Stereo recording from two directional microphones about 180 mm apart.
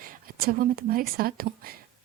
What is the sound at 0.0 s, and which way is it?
Speech, 55° right (ahead or behind).